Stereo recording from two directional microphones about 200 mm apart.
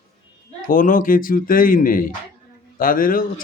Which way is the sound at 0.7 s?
40° left (ahead or behind).